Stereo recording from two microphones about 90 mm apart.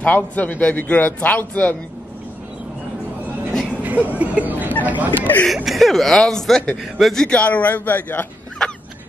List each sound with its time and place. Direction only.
0.0 s a man's voice: 20° left (ahead or behind)
3.8 s a sound: 20° right (ahead or behind)
4.8 s speech: 20° right (ahead or behind)
5.2 s speech: 20° left (ahead or behind)
5.7 s a man's voice: centre (ahead or behind); by 8.3 s 20° left (ahead or behind)
8.6 s a sound: 5° left (ahead or behind)